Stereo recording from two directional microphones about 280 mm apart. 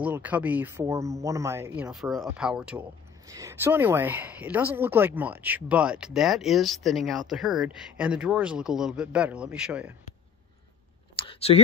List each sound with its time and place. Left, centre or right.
0.0 s speech: centre
11.1 s clicking: centre